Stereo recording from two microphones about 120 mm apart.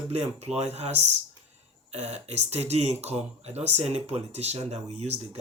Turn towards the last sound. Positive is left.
turn(degrees=-60)  # may be behind; listen again after turning